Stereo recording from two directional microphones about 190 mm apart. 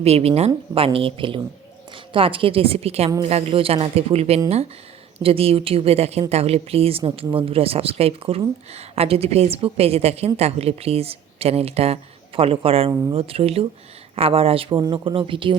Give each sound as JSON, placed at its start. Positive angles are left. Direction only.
{"t": 0.0, "sound": "speech", "side_deg": -35}
{"t": 12.9, "sound": "speech", "side_deg": -15}
{"t": 13.1, "sound": "speech", "side_deg": -30}